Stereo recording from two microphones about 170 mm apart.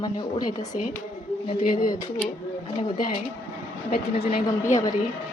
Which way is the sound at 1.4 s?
35° left (ahead or behind).